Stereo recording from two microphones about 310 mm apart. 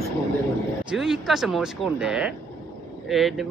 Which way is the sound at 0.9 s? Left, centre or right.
Centre.